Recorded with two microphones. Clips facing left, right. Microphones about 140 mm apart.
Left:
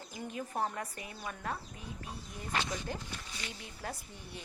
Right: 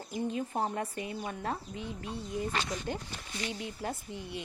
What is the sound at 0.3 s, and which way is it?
A woman's voice, 25° right (ahead or behind).